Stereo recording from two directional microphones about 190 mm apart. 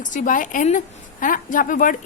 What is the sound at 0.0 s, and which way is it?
A woman's voice, 40° left (ahead or behind).